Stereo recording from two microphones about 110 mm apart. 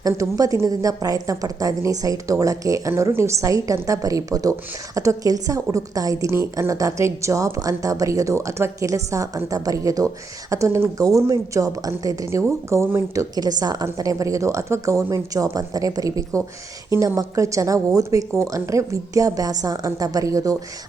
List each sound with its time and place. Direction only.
0.0 s a woman's voice: 35° right (ahead or behind)
13.3 s a woman's voice: 35° right (ahead or behind)